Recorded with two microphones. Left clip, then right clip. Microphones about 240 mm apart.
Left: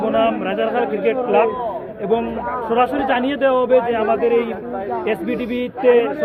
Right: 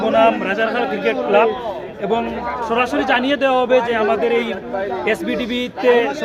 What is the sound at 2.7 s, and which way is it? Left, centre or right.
A man's voice, centre.